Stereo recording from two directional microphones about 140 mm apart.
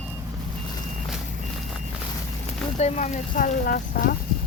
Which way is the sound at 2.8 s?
55° left (ahead or behind).